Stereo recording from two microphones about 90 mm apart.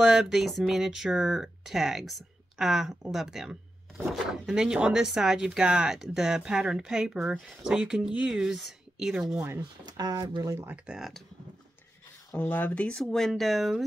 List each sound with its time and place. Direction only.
0.0 s speech: 5° right (ahead or behind)
9.6 s speech: 50° right (ahead or behind)
10.9 s speech: 5° right (ahead or behind)
12.4 s speech: 20° left (ahead or behind)
13.0 s speech: 5° left (ahead or behind)